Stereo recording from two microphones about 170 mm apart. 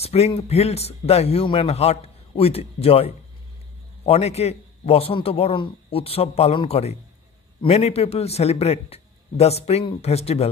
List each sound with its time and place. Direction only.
0.0 s a man's voice: 40° left (ahead or behind)